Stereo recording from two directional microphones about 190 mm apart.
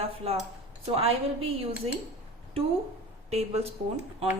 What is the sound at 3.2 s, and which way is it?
Speech, 35° right (ahead or behind).